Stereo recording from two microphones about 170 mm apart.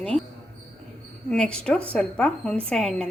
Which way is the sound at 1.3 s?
5° left (ahead or behind).